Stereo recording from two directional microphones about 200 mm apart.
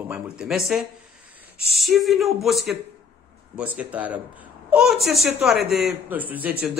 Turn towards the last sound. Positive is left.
turn(degrees=-10)  # may be behind; listen again after turning